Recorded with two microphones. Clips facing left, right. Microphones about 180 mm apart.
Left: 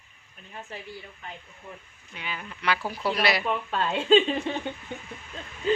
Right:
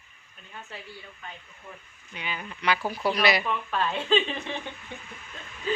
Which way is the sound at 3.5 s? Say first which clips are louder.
Left 1 dB; 30° left (ahead or behind).